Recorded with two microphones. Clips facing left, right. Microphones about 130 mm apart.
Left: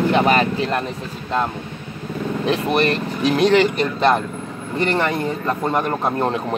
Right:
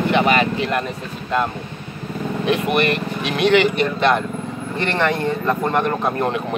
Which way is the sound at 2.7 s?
35° left (ahead or behind).